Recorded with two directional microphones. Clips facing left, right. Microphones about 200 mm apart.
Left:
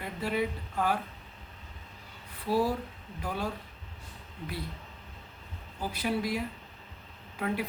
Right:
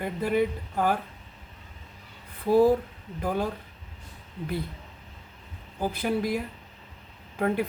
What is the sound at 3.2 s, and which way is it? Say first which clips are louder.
Speech: right 7 dB; 50° right (ahead or behind).